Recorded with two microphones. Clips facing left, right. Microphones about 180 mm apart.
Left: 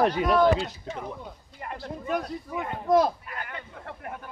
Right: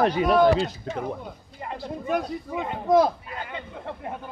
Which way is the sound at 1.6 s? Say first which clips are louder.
Right 3 dB; 20° right (ahead or behind).